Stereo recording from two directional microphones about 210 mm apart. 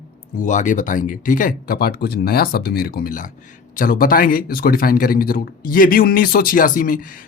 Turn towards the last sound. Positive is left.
turn(degrees=40)  # may be behind; listen again after turning